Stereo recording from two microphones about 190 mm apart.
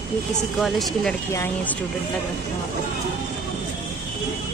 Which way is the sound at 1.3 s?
15° left (ahead or behind).